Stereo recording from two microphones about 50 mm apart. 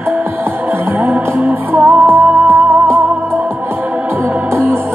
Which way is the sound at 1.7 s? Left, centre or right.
Right.